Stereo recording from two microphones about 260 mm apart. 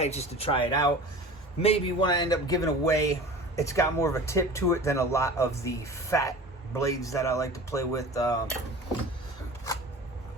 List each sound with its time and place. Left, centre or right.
0.0 s a man's voice: left